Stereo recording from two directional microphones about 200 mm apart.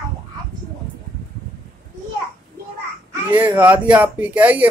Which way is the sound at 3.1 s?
10° right (ahead or behind).